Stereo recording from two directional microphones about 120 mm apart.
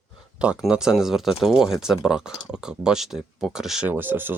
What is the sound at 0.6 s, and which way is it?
Speech, 5° right (ahead or behind).